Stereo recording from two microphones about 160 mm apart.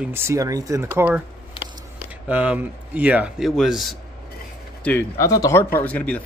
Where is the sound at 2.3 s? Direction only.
10° right (ahead or behind).